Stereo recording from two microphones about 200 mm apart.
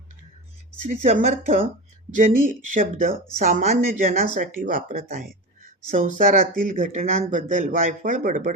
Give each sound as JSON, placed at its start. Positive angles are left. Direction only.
{"t": 0.9, "sound": "speech", "side_deg": -40}